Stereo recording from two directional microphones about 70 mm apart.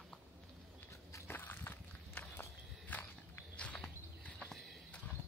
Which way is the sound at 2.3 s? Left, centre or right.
Left.